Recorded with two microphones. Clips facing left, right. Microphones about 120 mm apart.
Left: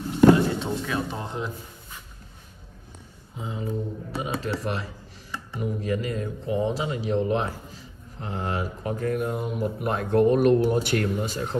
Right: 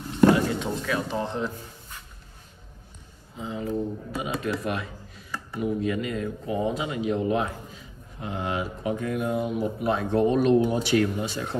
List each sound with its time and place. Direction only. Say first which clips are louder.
0.3 s a sound: left 3 dB; 25° left (ahead or behind)
1.2 s a man's voice: right 3 dB; 15° left (ahead or behind)
3.3 s speech: right 2 dB; 25° left (ahead or behind)
8.5 s speech: right 1 dB; 40° left (ahead or behind)